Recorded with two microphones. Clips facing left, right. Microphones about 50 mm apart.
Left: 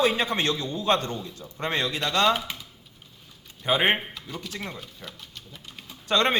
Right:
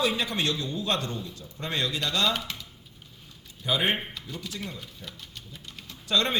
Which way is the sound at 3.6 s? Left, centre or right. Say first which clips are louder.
Left 4 dB; left.